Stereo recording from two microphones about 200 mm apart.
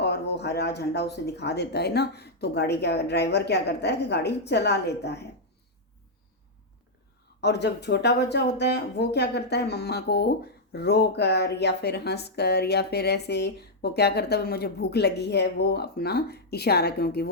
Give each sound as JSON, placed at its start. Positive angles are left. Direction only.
{"t": 0.0, "sound": "speech", "side_deg": 55}
{"t": 7.4, "sound": "speech", "side_deg": 55}